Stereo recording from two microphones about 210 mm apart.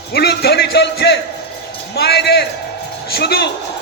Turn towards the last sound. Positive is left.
turn(degrees=50)  # may be behind; listen again after turning